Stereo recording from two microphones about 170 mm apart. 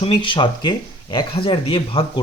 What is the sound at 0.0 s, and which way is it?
Speech, 30° left (ahead or behind).